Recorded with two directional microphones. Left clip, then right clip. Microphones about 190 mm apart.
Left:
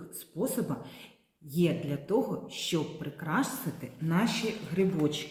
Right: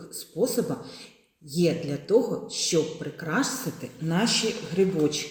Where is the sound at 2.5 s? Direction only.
30° right (ahead or behind).